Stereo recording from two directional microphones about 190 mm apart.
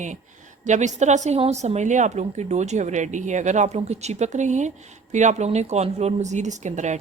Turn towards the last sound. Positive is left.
turn(degrees=-40)  # may be behind; listen again after turning